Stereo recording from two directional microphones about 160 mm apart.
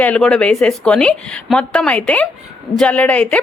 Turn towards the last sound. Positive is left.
turn(degrees=10)  # may be behind; listen again after turning